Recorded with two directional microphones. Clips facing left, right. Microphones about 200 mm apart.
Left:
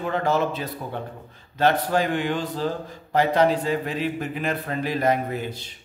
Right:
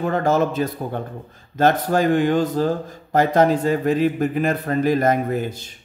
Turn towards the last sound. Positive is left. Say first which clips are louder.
# right 4 dB
turn(degrees=-45)  # may be behind; listen again after turning